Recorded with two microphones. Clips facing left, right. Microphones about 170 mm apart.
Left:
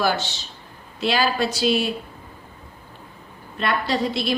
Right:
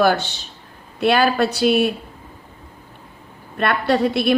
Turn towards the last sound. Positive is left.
turn(degrees=-60)  # may be behind; listen again after turning